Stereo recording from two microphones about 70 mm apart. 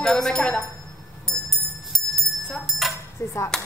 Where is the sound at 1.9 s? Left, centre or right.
Centre.